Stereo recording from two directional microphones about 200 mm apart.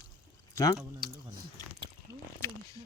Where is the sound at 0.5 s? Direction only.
15° left (ahead or behind).